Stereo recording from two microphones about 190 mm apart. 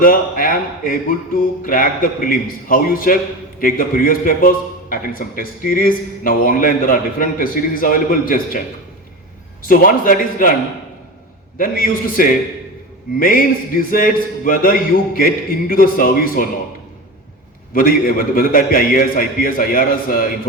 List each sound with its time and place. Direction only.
0.0 s a man's voice: 50° left (ahead or behind)
9.6 s a man's voice: 50° left (ahead or behind)
11.5 s a man's voice: 50° left (ahead or behind)
17.7 s a man's voice: 50° left (ahead or behind)